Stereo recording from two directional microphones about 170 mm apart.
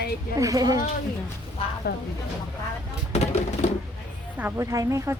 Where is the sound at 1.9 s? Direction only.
70° left (ahead or behind).